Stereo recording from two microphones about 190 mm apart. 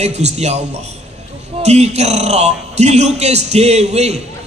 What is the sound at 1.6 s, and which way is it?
A man's voice, 35° right (ahead or behind).